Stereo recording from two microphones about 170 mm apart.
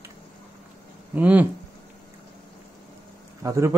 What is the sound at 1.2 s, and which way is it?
Speech, 10° right (ahead or behind).